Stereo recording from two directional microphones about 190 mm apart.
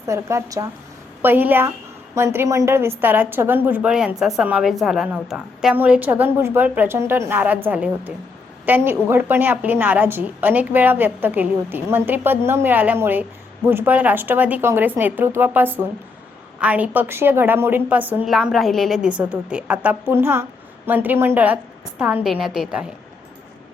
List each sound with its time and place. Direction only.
0.1 s a woman's voice: 15° right (ahead or behind)